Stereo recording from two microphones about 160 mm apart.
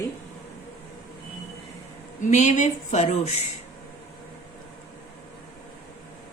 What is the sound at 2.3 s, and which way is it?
Speech, 50° left (ahead or behind).